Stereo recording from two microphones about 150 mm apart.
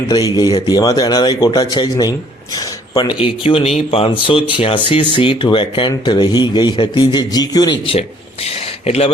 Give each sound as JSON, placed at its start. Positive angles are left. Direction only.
{"t": 0.3, "sound": "a man's voice", "side_deg": 25}
{"t": 3.2, "sound": "a man's voice", "side_deg": 40}
{"t": 8.4, "sound": "speech", "side_deg": 40}